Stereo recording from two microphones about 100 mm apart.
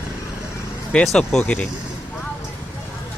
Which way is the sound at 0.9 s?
5° left (ahead or behind).